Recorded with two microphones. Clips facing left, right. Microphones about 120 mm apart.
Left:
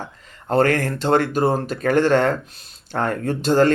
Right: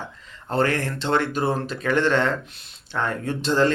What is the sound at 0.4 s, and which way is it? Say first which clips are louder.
Speech: left 5 dB; 45° left (ahead or behind).